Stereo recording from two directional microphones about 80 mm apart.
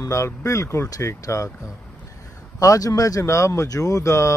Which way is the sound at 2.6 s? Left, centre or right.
Left.